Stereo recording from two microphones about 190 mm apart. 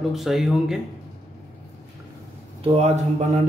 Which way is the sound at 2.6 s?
35° right (ahead or behind).